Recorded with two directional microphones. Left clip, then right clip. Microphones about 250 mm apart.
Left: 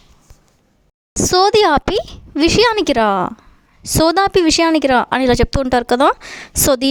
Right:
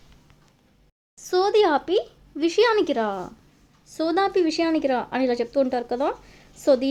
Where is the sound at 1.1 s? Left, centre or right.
Left.